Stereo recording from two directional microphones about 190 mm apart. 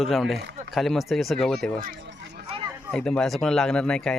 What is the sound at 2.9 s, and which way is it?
Speech, 5° left (ahead or behind).